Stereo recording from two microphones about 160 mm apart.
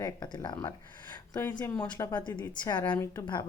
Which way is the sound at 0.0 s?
25° left (ahead or behind).